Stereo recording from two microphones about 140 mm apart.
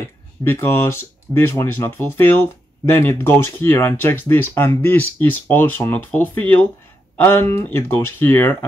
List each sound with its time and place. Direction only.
0.4 s speech: 15° left (ahead or behind)